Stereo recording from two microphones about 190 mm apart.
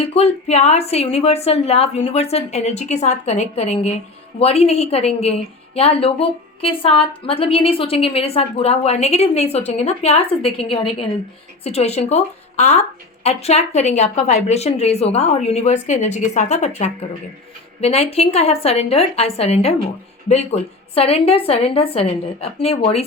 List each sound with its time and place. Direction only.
0.0 s a woman's voice: 30° left (ahead or behind)